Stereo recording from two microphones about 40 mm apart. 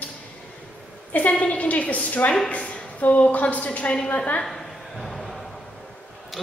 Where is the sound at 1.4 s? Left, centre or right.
Left.